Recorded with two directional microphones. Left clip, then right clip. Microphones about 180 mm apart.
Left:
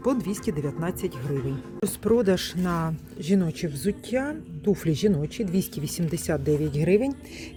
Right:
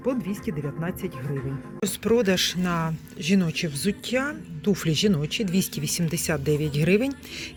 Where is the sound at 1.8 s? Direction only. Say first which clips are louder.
Even; 30° left (ahead or behind).